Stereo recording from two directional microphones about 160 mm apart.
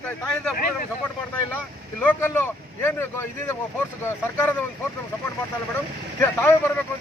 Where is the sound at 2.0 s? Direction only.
15° left (ahead or behind).